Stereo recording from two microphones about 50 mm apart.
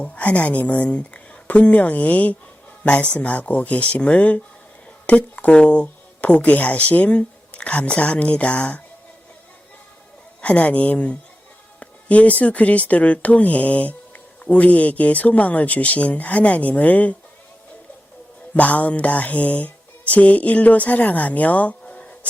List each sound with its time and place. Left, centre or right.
0.0 s a woman's voice: left
10.4 s speech: left
18.5 s speech: left